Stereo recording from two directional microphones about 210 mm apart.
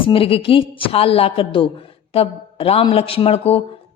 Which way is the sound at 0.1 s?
25° left (ahead or behind).